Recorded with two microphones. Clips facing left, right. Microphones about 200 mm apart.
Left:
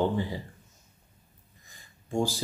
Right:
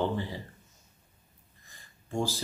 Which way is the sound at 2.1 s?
15° left (ahead or behind).